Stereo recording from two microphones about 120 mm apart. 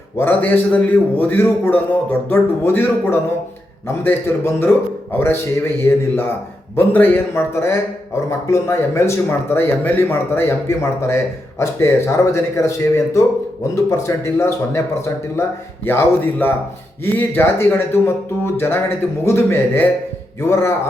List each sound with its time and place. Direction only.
0.2 s a man's voice: 20° left (ahead or behind)